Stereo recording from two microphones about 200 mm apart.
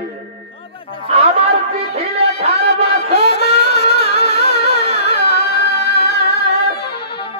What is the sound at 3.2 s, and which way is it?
Music, 55° left (ahead or behind).